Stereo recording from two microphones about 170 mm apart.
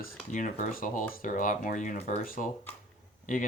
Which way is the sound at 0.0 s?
50° left (ahead or behind).